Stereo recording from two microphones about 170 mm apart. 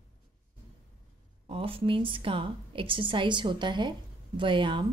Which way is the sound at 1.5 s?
30° right (ahead or behind).